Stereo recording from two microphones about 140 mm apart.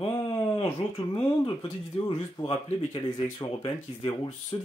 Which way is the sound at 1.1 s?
40° left (ahead or behind).